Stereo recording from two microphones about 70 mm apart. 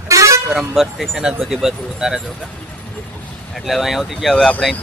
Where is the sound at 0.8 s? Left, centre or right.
Centre.